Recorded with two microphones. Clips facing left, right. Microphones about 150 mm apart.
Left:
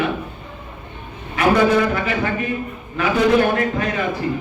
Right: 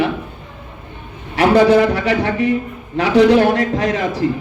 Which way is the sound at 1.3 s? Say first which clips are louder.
Right 5 dB; 75° right (ahead or behind).